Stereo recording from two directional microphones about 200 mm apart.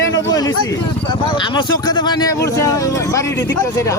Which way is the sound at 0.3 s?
20° left (ahead or behind).